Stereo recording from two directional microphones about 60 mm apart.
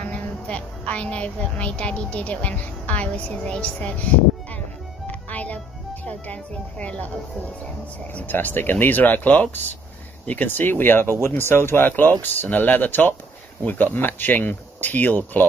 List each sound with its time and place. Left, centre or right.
0.1 s a woman's voice: centre
5.0 s music: left
6.0 s speech: left
8.1 s speech: left